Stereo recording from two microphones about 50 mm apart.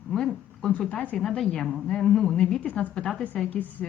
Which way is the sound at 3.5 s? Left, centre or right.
Left.